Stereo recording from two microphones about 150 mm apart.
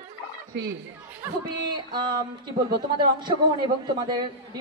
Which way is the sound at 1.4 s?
30° right (ahead or behind).